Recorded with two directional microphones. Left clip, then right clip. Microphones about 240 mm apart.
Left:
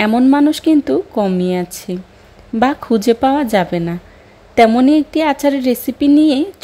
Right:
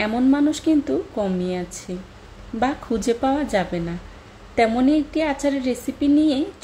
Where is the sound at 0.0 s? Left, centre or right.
Left.